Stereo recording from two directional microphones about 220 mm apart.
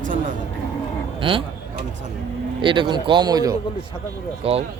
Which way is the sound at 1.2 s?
25° right (ahead or behind).